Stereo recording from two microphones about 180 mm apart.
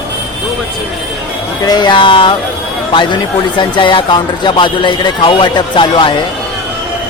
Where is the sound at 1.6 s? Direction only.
25° left (ahead or behind).